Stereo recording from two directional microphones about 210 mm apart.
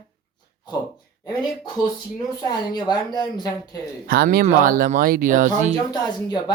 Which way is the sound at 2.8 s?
20° left (ahead or behind).